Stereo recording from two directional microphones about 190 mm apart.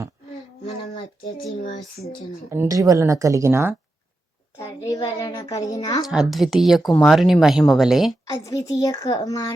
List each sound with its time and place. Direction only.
0.6 s a child's voice: 30° left (ahead or behind)
2.5 s a woman's voice: 15° right (ahead or behind)
4.5 s a child's voice: 15° left (ahead or behind)
6.1 s speech: centre (ahead or behind)
8.3 s a child's voice: 15° left (ahead or behind)